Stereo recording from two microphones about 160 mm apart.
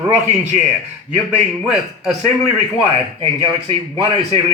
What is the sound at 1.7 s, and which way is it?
A man's voice, 5° right (ahead or behind).